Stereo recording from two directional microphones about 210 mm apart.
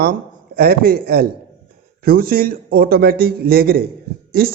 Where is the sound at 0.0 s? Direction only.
45° right (ahead or behind).